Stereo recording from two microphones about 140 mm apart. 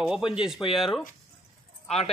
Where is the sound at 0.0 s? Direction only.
5° right (ahead or behind).